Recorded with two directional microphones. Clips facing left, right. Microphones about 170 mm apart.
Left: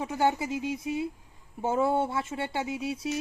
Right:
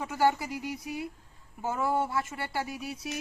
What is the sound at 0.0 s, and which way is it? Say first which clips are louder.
Speech: even; 20° left (ahead or behind).